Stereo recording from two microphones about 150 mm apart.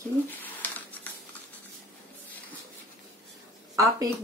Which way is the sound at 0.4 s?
10° left (ahead or behind).